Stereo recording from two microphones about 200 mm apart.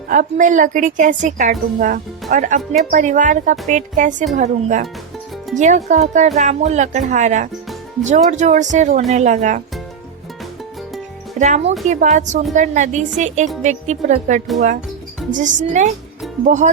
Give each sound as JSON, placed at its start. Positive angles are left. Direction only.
{"t": 0.1, "sound": "a woman's voice", "side_deg": -40}
{"t": 11.3, "sound": "a woman's voice", "side_deg": -35}